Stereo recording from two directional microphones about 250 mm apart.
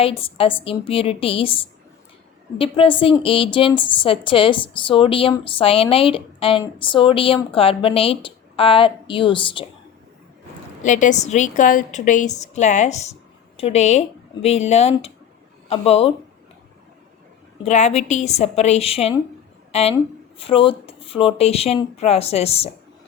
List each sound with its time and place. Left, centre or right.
0.0 s a woman's voice: left
10.8 s a woman's voice: left
17.6 s a woman's voice: left